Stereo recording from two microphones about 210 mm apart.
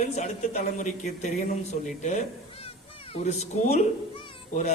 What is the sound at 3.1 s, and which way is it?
A child's voice, 30° left (ahead or behind).